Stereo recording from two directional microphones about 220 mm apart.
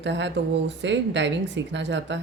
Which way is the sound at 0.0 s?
55° right (ahead or behind).